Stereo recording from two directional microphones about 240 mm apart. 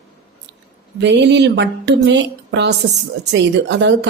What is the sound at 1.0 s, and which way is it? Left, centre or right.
Speech, right.